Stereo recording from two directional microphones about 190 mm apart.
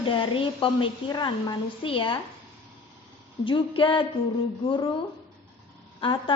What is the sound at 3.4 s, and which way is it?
A woman's voice, 25° left (ahead or behind).